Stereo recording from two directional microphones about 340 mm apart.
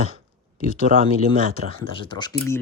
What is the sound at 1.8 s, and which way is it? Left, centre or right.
Speech, centre.